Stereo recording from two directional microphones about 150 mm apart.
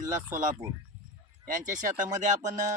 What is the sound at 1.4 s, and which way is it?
Speech, 60° right (ahead or behind).